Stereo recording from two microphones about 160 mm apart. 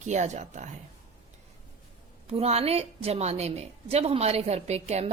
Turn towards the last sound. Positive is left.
turn(degrees=-45)  # may be behind; listen again after turning